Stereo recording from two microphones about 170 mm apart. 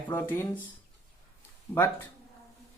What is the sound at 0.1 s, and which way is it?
Speech, 15° left (ahead or behind).